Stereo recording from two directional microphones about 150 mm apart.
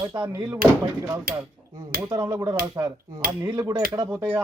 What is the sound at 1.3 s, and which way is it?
Hammer, 75° right (ahead or behind).